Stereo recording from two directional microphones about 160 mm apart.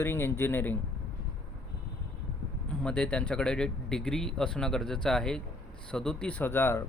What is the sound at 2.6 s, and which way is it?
Speech, 5° left (ahead or behind).